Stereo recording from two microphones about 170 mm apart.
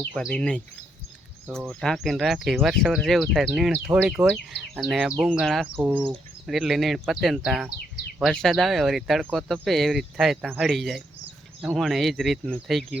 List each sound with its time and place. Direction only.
0.1 s speech: centre (ahead or behind)